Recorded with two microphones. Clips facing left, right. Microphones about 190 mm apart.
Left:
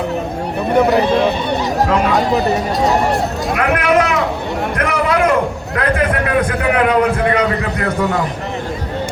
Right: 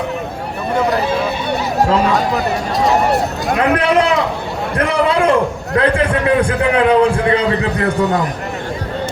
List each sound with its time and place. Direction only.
0.9 s speech: 5° right (ahead or behind)
3.6 s a man's voice: 30° right (ahead or behind)